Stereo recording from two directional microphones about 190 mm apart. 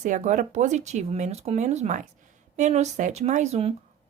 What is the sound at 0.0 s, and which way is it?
Speech, 40° right (ahead or behind).